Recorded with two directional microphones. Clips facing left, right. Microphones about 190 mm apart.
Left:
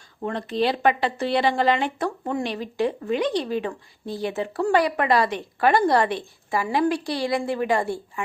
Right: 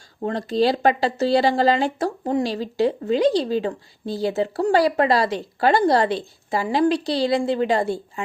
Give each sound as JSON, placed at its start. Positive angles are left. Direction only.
{"t": 0.3, "sound": "speech", "side_deg": -35}